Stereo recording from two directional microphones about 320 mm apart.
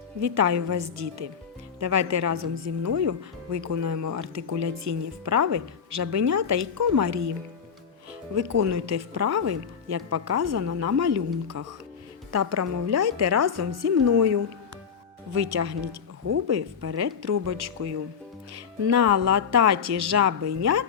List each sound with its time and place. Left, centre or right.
0.2 s a woman's voice: right
8.4 s speech: right
16.2 s speech: right